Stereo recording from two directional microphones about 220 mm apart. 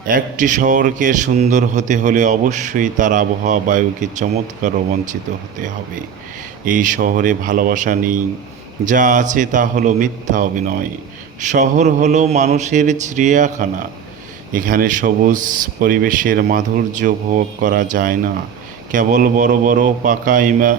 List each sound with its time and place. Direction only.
0.1 s a man's voice: 35° right (ahead or behind)
6.7 s a man's voice: 35° right (ahead or behind)